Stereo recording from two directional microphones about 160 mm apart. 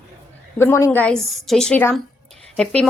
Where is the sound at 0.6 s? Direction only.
15° left (ahead or behind).